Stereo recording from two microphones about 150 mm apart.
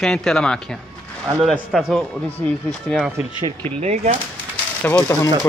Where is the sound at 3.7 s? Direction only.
45° right (ahead or behind).